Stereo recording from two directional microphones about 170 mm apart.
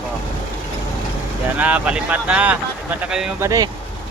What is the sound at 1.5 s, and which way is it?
Speech, 10° right (ahead or behind).